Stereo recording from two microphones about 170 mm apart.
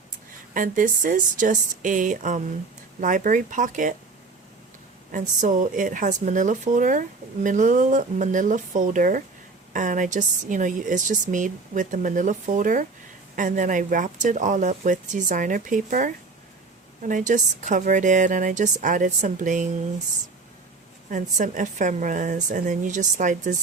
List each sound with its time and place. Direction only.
0.5 s speech: 55° right (ahead or behind)
5.1 s speech: 50° right (ahead or behind)
21.1 s speech: 50° right (ahead or behind)